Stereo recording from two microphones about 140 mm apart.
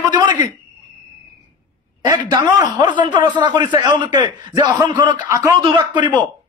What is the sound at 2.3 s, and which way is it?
A man's voice, 25° right (ahead or behind).